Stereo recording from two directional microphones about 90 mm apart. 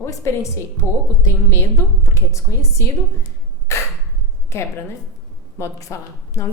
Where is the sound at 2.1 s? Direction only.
35° left (ahead or behind).